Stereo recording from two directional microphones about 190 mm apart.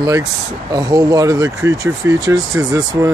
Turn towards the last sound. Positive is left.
turn(degrees=-15)  # may be behind; listen again after turning